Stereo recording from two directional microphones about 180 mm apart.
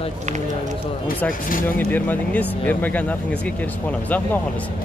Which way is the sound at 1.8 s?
10° left (ahead or behind).